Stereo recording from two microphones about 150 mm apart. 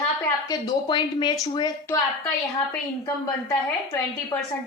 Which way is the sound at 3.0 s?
20° left (ahead or behind).